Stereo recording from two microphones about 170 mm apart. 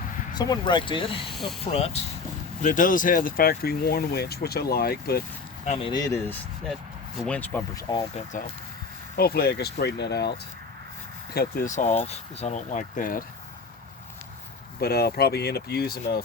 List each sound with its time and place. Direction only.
0.3 s speech: 25° left (ahead or behind)
1.3 s speech: centre (ahead or behind)
1.6 s speech: 35° left (ahead or behind)
2.6 s speech: 50° left (ahead or behind)
5.6 s speech: 40° left (ahead or behind)
5.9 s speech: 20° left (ahead or behind)
7.2 s speech: 5° left (ahead or behind)
7.8 s speech: 20° left (ahead or behind)
9.1 s speech: 65° left (ahead or behind)
11.3 s speech: 55° left (ahead or behind)
14.8 s speech: 65° left (ahead or behind)